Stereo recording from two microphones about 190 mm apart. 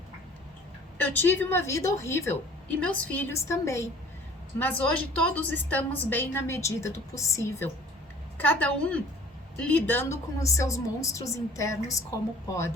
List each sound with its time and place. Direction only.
0.9 s a woman's voice: 10° left (ahead or behind)